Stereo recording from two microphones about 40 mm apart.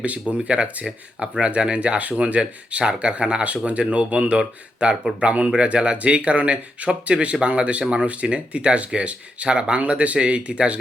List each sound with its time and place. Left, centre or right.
0.0 s speech: right